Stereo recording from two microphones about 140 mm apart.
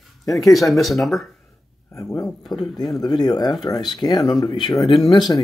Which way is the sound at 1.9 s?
25° left (ahead or behind).